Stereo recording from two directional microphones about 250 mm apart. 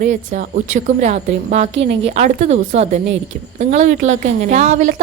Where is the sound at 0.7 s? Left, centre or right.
Right.